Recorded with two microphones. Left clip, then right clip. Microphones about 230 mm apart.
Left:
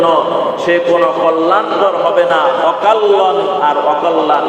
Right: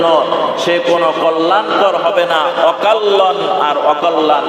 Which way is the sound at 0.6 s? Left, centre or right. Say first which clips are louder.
Left 3 dB; right.